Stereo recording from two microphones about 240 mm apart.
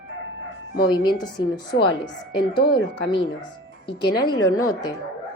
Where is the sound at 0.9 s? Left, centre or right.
Centre.